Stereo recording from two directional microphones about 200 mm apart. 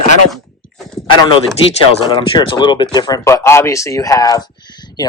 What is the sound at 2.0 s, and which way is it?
Speech, 25° left (ahead or behind).